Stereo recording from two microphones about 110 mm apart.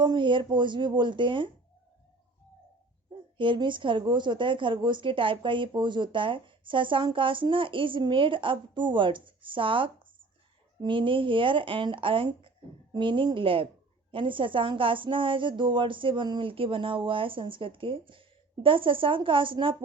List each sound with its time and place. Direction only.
0.0 s a woman's voice: 45° right (ahead or behind)
3.3 s a woman's voice: 50° right (ahead or behind)